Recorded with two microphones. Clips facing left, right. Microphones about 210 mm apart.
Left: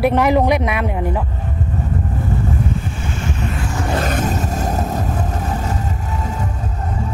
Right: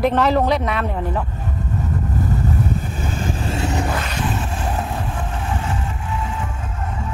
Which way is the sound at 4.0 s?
45° left (ahead or behind).